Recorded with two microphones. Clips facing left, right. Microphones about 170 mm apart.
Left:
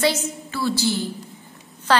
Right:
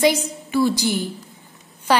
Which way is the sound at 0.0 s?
15° right (ahead or behind).